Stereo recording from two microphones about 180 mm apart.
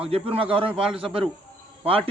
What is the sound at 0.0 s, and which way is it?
A man's voice, 30° right (ahead or behind).